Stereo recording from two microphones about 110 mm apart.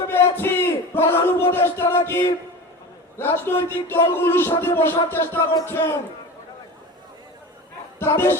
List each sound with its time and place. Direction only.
0.1 s a sound: 20° left (ahead or behind)
3.2 s a man's voice: 20° left (ahead or behind)
7.9 s a man's voice: 20° left (ahead or behind)